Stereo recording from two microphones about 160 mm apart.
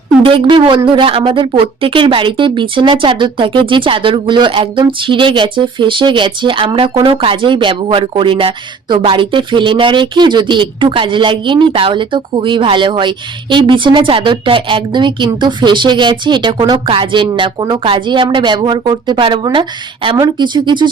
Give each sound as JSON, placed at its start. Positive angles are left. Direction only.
{"t": 0.3, "sound": "speech", "side_deg": -30}